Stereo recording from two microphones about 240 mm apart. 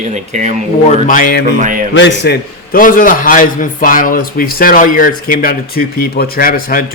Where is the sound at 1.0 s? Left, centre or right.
Left.